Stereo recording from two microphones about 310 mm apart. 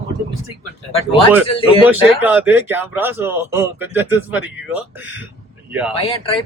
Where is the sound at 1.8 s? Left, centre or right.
Centre.